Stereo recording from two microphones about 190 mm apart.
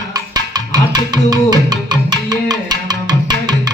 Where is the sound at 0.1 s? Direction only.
20° right (ahead or behind).